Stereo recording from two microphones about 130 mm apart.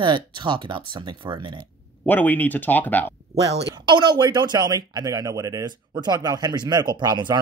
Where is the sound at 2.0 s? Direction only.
15° left (ahead or behind).